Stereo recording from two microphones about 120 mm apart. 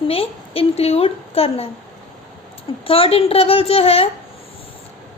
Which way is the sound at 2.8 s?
50° left (ahead or behind).